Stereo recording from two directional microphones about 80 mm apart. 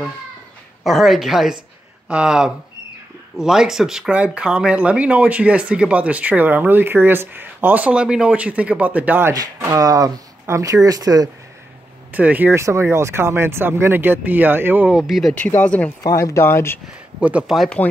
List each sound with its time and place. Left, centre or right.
0.8 s a woman's voice: centre; by 9.3 s right
9.7 s speech: right
12.1 s speech: centre
12.5 s speech: right
14.9 s a woman's voice: centre
15.6 s speech: centre
16.0 s speech: left
16.4 s speech: left
17.2 s speech: centre